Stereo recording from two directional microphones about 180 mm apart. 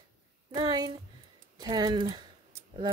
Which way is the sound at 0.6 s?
25° right (ahead or behind).